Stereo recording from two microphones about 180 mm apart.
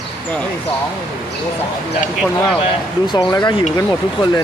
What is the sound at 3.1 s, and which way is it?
Speech, 25° left (ahead or behind).